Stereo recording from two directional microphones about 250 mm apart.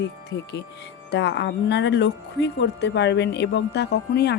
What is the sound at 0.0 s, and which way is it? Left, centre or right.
Speech, left.